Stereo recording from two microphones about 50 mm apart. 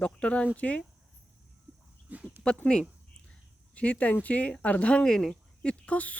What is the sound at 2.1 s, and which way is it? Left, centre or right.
Speech, right.